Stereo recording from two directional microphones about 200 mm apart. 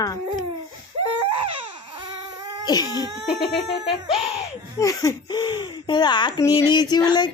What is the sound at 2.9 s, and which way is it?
Speech, 15° right (ahead or behind).